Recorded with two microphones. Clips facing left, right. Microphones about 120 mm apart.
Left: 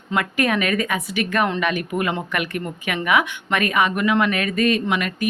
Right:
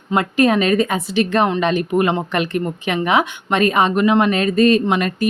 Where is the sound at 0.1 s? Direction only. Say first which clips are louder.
Right 6 dB; 25° right (ahead or behind).